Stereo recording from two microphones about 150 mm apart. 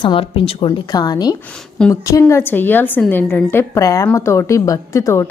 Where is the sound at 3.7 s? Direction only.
20° left (ahead or behind).